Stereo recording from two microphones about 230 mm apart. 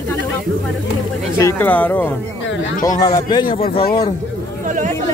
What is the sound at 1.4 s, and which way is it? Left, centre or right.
Speech, centre.